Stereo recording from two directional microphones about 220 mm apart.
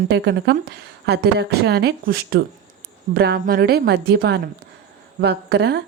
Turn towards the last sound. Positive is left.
turn(degrees=-50)  # may be behind; listen again after turning